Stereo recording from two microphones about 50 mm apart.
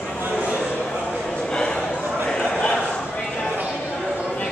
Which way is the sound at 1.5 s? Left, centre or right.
Centre.